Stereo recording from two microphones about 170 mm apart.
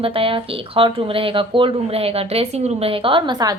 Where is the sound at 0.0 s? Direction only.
30° right (ahead or behind).